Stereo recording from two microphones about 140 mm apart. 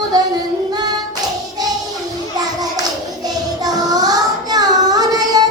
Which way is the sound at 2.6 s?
25° right (ahead or behind).